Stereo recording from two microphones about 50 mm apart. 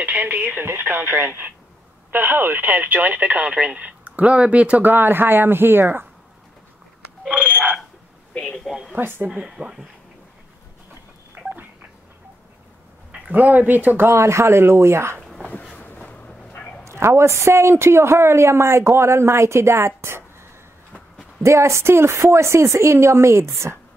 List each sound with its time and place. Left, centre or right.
0.0 s speech: right
0.6 s speech: right
4.8 s speech: right
7.4 s a sound: right
8.3 s a sound: left
8.9 s speech: right
9.3 s speech: centre
13.3 s speech: right
14.1 s a man's voice: right
15.7 s vehicle: left
16.8 s a man's voice: right
21.4 s a woman's voice: right